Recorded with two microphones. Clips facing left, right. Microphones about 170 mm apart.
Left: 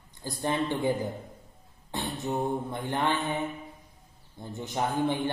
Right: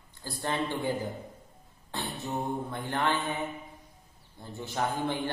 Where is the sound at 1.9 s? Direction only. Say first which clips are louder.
Left 3 dB; 15° left (ahead or behind).